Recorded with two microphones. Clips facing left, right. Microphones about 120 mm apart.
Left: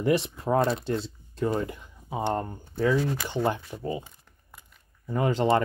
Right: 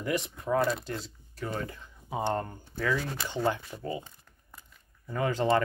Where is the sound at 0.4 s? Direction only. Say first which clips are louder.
Left 3 dB; 30° left (ahead or behind).